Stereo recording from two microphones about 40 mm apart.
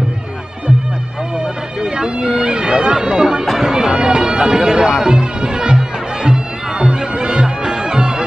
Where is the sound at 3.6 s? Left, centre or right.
Centre.